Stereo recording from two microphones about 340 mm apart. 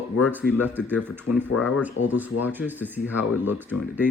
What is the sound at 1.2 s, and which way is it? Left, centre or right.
Speech, left.